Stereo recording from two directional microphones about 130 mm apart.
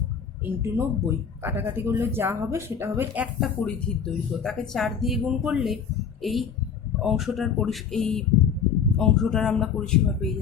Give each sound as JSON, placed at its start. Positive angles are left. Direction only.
{"t": 0.4, "sound": "speech", "side_deg": -20}
{"t": 3.4, "sound": "speech", "side_deg": 5}